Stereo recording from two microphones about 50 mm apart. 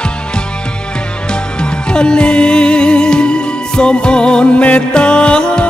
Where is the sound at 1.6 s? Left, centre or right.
Centre.